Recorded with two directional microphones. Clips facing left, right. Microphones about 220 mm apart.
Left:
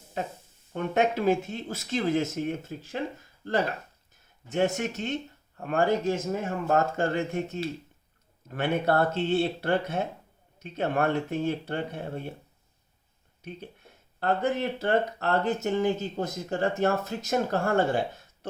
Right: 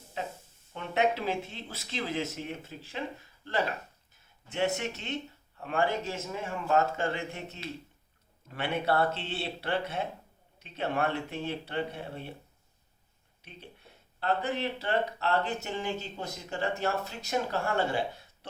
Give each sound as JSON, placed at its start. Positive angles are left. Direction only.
{"t": 0.7, "sound": "speech", "side_deg": 45}
{"t": 4.5, "sound": "speech", "side_deg": 45}
{"t": 13.4, "sound": "speech", "side_deg": 45}